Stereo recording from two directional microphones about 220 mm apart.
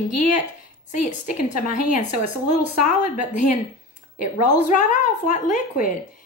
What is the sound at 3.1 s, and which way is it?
Speech, 35° left (ahead or behind).